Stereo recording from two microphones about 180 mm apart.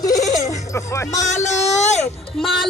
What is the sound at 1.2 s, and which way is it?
Speech, 40° left (ahead or behind).